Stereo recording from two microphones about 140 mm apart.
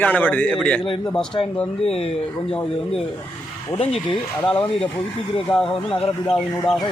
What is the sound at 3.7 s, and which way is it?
Speech, 40° left (ahead or behind).